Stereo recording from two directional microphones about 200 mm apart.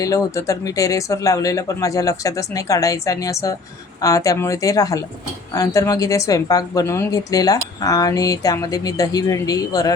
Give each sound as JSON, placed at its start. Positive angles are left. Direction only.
{"t": 0.0, "sound": "speech", "side_deg": 15}